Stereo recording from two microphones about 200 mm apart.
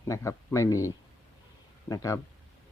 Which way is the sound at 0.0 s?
15° left (ahead or behind).